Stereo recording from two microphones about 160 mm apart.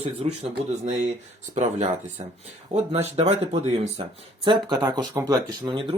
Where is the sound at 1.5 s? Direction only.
45° right (ahead or behind).